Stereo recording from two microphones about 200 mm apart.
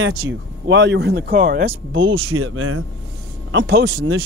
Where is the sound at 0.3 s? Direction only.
60° right (ahead or behind).